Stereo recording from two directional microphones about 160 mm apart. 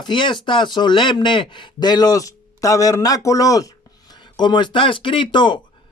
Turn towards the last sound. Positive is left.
turn(degrees=30)  # may be behind; listen again after turning